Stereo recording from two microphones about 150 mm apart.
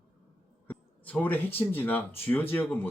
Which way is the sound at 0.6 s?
10° left (ahead or behind).